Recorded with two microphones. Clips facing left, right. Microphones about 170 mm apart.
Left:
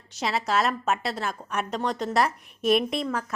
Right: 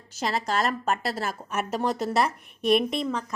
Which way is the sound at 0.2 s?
Centre (ahead or behind).